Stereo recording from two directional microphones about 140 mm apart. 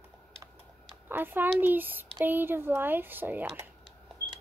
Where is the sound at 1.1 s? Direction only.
15° right (ahead or behind).